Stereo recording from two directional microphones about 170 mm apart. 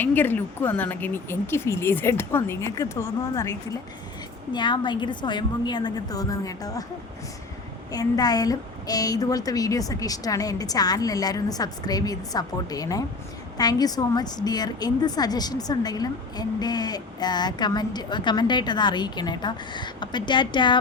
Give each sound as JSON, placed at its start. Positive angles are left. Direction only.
{"t": 0.0, "sound": "speech", "side_deg": 10}
{"t": 4.5, "sound": "a woman's voice", "side_deg": 25}
{"t": 7.9, "sound": "a woman's voice", "side_deg": 20}